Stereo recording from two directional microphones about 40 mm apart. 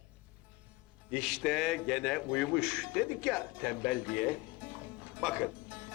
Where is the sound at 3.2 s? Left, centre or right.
Centre.